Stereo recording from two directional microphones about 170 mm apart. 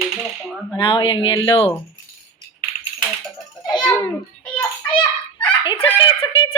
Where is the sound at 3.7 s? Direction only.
25° left (ahead or behind).